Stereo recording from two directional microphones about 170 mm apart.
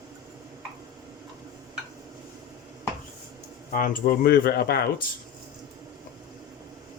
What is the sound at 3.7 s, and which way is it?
Speech, 55° left (ahead or behind).